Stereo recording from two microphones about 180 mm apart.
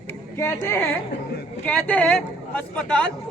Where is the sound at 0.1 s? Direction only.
15° left (ahead or behind).